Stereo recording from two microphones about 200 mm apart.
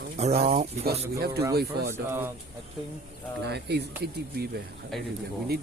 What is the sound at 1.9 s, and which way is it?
Speech, 10° right (ahead or behind).